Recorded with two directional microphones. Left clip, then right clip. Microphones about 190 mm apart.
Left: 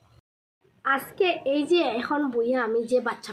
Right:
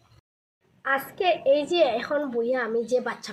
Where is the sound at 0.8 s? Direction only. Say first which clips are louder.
Even; 15° left (ahead or behind).